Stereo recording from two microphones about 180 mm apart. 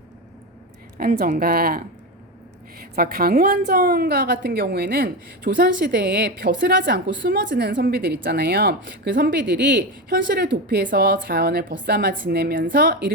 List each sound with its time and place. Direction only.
0.9 s a woman's voice: 55° right (ahead or behind)
2.9 s a woman's voice: 55° right (ahead or behind)